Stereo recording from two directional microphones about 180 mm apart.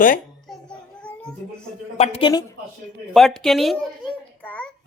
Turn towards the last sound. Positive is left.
turn(degrees=10)  # may be behind; listen again after turning